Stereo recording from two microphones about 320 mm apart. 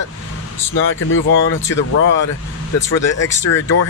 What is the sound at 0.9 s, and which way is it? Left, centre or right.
Speech, left.